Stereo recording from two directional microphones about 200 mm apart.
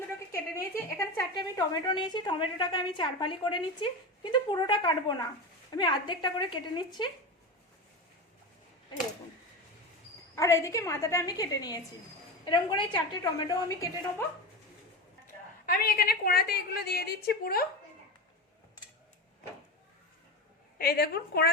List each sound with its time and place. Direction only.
0.3 s a sound: 10° left (ahead or behind)
1.3 s a woman's voice: 20° left (ahead or behind)
10.3 s a woman's voice: 15° left (ahead or behind)
15.6 s a woman's voice: 50° left (ahead or behind)
20.7 s a woman's voice: 50° left (ahead or behind)